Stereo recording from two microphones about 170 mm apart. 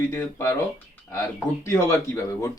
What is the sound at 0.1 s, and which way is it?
Speech, 15° left (ahead or behind).